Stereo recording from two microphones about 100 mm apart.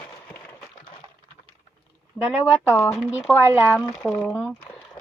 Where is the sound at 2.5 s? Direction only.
15° right (ahead or behind); by 4.2 s centre (ahead or behind).